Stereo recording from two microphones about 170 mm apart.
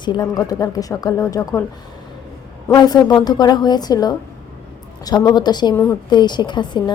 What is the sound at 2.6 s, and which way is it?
A woman's voice, 25° left (ahead or behind).